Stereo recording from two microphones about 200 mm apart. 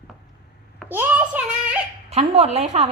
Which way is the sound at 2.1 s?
30° right (ahead or behind).